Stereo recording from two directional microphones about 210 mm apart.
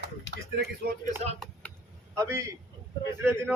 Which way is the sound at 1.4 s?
Centre (ahead or behind).